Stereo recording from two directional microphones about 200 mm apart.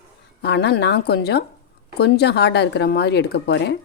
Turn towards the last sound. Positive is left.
turn(degrees=55)  # may be behind; listen again after turning